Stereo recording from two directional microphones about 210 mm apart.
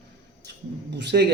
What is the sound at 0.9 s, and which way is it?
Speech, 55° right (ahead or behind).